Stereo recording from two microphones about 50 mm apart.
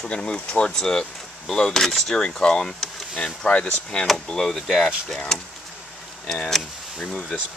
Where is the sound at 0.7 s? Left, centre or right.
Centre.